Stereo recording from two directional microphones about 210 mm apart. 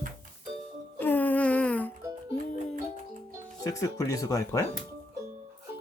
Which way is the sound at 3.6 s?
15° left (ahead or behind).